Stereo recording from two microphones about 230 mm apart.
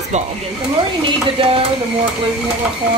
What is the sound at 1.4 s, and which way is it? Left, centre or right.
Speech, right.